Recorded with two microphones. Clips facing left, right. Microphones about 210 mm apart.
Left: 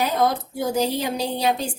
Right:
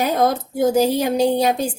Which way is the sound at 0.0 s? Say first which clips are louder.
Right 3 dB; 50° right (ahead or behind).